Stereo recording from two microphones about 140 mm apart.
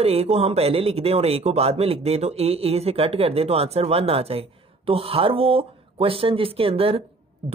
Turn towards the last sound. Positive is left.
turn(degrees=-40)  # may be behind; listen again after turning